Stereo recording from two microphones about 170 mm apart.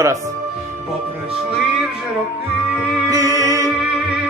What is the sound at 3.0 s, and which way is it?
Music, 20° right (ahead or behind).